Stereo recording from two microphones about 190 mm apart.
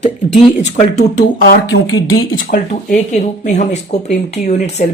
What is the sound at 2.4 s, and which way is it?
Speech, 40° left (ahead or behind).